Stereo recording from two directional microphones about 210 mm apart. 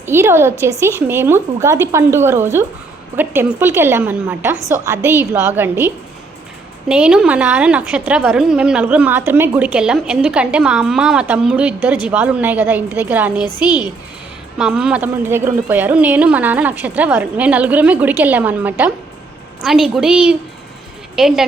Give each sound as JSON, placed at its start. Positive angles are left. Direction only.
{"t": 0.0, "sound": "a woman's voice", "side_deg": -10}
{"t": 13.4, "sound": "a woman's voice", "side_deg": 20}
{"t": 14.6, "sound": "a woman's voice", "side_deg": -5}